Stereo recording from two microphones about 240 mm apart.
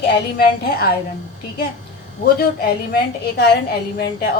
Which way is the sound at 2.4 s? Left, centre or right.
Left.